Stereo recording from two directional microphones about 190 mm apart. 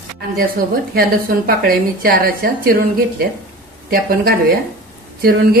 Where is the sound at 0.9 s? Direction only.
50° right (ahead or behind).